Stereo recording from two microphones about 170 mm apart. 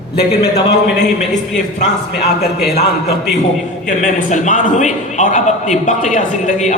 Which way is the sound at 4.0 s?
45° left (ahead or behind).